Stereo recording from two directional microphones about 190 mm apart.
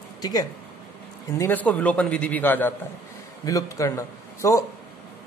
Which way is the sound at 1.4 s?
10° left (ahead or behind).